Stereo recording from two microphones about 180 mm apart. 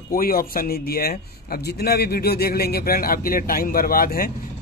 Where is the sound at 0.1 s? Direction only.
55° left (ahead or behind).